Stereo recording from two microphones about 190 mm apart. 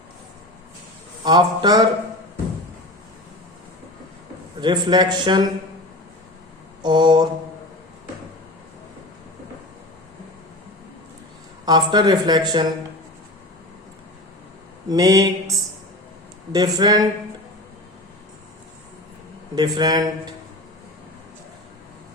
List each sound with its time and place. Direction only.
1.2 s speech: 20° right (ahead or behind)
4.6 s speech: 20° right (ahead or behind)
6.8 s speech: 25° right (ahead or behind)
11.6 s speech: 20° right (ahead or behind)
14.8 s speech: 20° right (ahead or behind)
16.5 s speech: 20° right (ahead or behind)
19.5 s speech: 20° right (ahead or behind)